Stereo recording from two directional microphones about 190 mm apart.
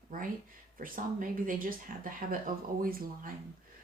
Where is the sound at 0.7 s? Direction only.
45° right (ahead or behind).